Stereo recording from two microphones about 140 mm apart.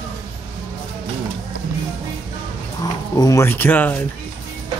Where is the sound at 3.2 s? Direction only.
20° left (ahead or behind).